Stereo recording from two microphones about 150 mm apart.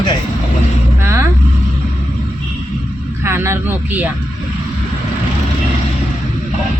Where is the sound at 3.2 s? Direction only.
15° right (ahead or behind).